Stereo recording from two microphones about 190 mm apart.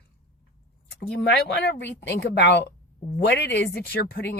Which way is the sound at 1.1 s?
65° left (ahead or behind).